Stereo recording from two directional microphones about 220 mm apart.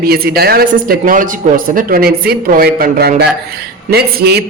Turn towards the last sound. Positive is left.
turn(degrees=-45)  # may be behind; listen again after turning